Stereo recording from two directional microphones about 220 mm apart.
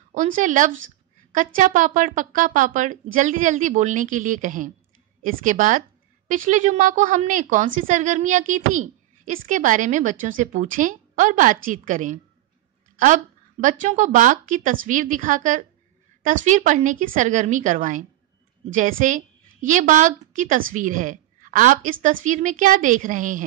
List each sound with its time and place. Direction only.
0.1 s a woman's voice: 35° right (ahead or behind)